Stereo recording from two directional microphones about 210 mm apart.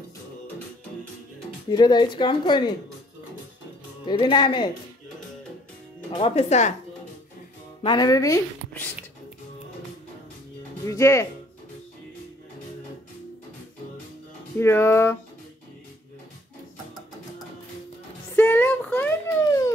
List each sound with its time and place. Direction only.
1.7 s speech: 20° left (ahead or behind)
4.0 s speech: 20° left (ahead or behind)
6.1 s speech: 30° left (ahead or behind)
7.8 s speech: 20° left (ahead or behind)
10.9 s speech: 15° left (ahead or behind)
14.6 s speech: 10° left (ahead or behind)
18.3 s a sound: 10° left (ahead or behind)